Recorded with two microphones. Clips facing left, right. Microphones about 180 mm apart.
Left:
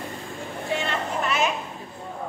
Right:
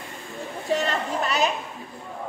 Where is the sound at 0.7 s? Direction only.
40° right (ahead or behind).